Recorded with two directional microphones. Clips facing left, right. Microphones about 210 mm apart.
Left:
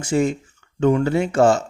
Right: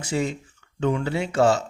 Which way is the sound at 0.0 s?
50° left (ahead or behind).